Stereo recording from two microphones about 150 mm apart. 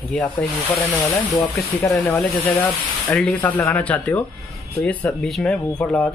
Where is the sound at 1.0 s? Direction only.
20° left (ahead or behind).